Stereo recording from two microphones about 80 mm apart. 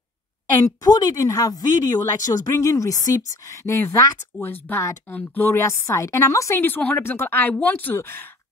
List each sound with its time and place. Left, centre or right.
0.7 s speech: left
4.4 s speech: left
5.6 s speech: left
6.6 s speech: left